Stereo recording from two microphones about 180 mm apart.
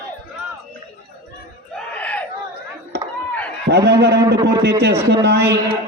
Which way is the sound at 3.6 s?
65° right (ahead or behind).